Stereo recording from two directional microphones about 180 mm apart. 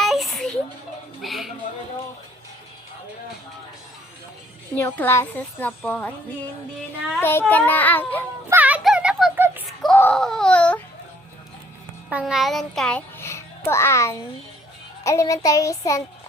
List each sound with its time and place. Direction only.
0.0 s a sound: centre (ahead or behind)
4.7 s a woman's voice: 10° left (ahead or behind)
8.4 s music: 10° right (ahead or behind)
9.8 s baby cry: 10° left (ahead or behind)
12.0 s a child's voice: centre (ahead or behind); by 16.0 s 15° left (ahead or behind)